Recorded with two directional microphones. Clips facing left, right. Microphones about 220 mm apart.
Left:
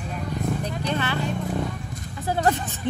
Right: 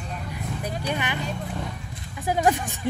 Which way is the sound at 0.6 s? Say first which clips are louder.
Left 2 dB; 10° right (ahead or behind).